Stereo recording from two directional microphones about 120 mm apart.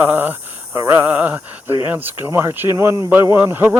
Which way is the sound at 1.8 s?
15° right (ahead or behind).